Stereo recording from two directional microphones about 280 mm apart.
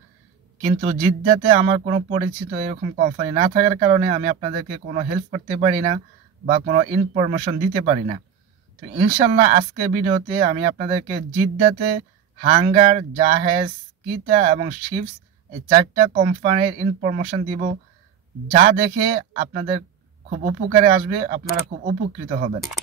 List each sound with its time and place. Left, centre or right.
0.7 s speech: right
12.4 s speech: right